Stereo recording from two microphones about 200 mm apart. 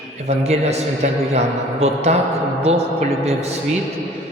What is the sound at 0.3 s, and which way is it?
A man's voice, 35° right (ahead or behind).